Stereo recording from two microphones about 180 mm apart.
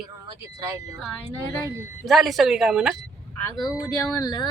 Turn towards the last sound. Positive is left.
turn(degrees=20)  # may be behind; listen again after turning